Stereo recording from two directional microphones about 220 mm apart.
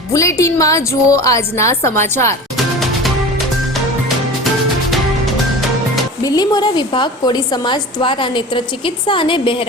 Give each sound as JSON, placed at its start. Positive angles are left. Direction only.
{"t": 0.1, "sound": "a woman's voice", "side_deg": 15}
{"t": 6.2, "sound": "a woman's voice", "side_deg": 15}